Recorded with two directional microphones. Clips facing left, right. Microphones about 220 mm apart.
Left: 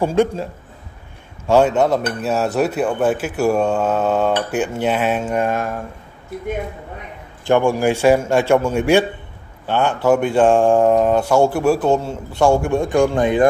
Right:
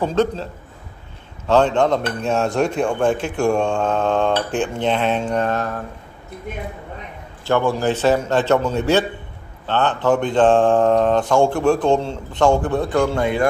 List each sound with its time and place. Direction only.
0.0 s speech: 10° left (ahead or behind)
1.5 s speech: 10° left (ahead or behind)
7.4 s speech: 15° left (ahead or behind)